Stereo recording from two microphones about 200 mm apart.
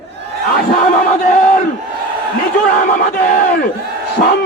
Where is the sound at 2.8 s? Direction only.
45° left (ahead or behind).